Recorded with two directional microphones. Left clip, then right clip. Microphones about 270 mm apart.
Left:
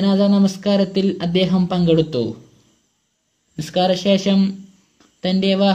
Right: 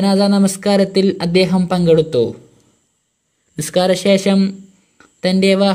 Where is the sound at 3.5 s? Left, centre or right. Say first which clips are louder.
Right 3 dB; right.